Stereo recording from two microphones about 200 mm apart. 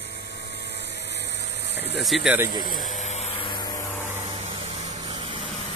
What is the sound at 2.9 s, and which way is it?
Vehicle, 35° left (ahead or behind).